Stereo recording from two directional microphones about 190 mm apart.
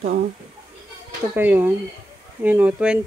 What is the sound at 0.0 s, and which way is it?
Speech, 50° right (ahead or behind).